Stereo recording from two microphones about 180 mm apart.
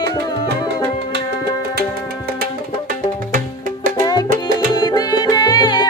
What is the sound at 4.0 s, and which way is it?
Music, 20° left (ahead or behind).